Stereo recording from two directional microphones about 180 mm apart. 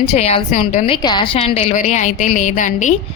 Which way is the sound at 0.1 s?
35° left (ahead or behind).